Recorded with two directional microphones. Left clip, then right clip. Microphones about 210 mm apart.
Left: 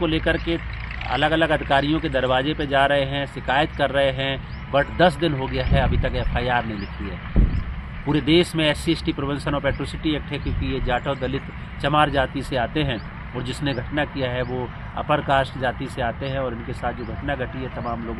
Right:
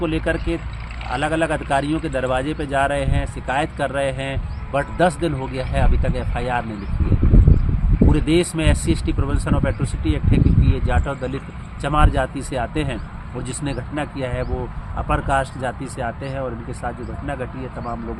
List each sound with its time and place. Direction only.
0.0 s a man's voice: 5° right (ahead or behind)
8.1 s a man's voice: 5° right (ahead or behind)